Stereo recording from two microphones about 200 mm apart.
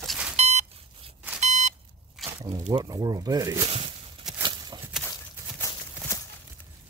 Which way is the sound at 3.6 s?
30° right (ahead or behind).